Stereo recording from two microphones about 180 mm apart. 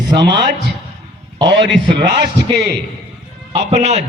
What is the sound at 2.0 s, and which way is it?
Speech, 25° right (ahead or behind).